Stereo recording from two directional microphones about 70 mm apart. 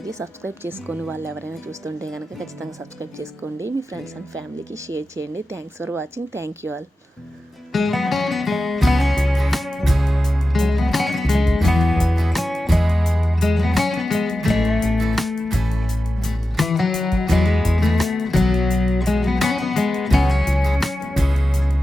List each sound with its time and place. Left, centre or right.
0.0 s a woman's voice: right
1.8 s a woman's voice: right
2.1 s a woman's voice: centre
3.2 s a woman's voice: right
7.7 s music: centre